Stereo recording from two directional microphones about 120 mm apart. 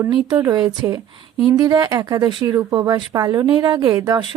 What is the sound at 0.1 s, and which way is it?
Speech, 35° right (ahead or behind).